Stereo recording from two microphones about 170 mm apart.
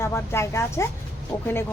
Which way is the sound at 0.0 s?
15° left (ahead or behind).